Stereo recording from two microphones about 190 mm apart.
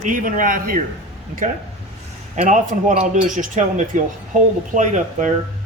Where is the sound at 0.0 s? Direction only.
45° right (ahead or behind).